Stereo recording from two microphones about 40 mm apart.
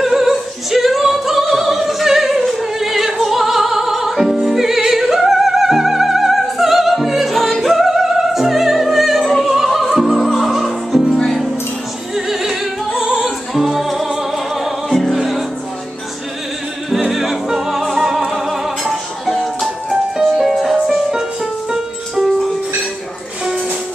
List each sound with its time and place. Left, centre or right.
0.0 s opera: centre
9.4 s music: centre
12.3 s music: centre
13.0 s music: right
13.5 s music: centre
16.9 s music: centre